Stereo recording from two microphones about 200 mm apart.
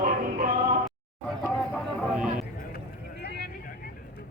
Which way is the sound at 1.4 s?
5° left (ahead or behind).